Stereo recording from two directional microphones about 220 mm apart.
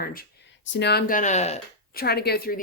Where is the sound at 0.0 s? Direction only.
40° left (ahead or behind).